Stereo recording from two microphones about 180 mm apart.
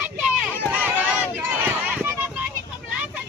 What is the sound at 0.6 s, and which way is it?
Run, 10° right (ahead or behind).